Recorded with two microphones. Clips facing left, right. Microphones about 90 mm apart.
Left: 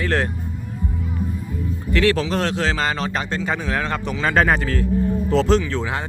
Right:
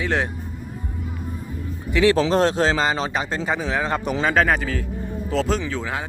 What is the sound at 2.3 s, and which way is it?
Speech, 30° right (ahead or behind).